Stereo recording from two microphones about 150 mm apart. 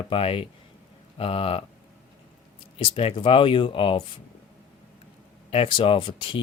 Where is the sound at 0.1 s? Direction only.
40° left (ahead or behind).